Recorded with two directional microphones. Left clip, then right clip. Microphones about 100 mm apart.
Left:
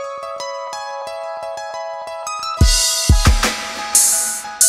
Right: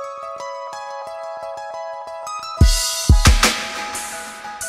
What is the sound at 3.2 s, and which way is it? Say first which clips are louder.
Music: right 2 dB; centre (ahead or behind).